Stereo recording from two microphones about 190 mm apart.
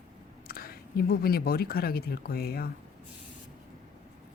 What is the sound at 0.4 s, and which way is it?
Speech, 50° left (ahead or behind).